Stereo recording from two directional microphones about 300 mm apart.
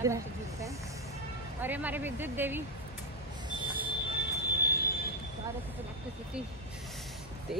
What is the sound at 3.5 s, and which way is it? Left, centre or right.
Vehicle, centre.